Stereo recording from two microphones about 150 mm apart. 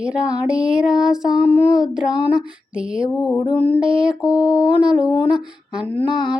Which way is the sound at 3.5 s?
35° left (ahead or behind).